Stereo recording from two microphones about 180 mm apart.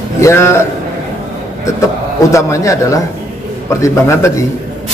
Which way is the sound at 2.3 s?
15° left (ahead or behind).